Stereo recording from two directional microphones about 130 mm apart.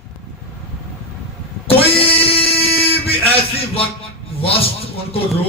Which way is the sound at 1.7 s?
45° left (ahead or behind).